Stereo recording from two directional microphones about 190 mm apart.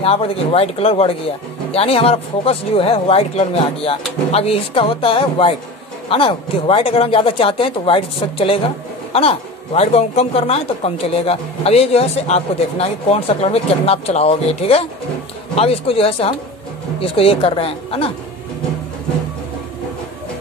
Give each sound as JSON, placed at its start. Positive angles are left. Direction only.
{"t": 0.0, "sound": "a woman's voice", "side_deg": 30}